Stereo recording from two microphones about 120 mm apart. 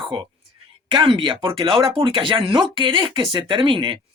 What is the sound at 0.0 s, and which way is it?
A woman's voice, 40° right (ahead or behind).